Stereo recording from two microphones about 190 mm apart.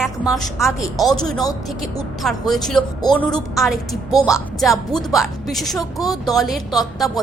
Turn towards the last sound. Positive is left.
turn(degrees=0)  # may be behind; listen again after turning